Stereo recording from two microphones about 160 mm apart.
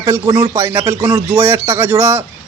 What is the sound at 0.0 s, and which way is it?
A man's voice, 25° right (ahead or behind).